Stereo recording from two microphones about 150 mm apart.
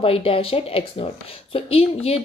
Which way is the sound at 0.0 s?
40° left (ahead or behind).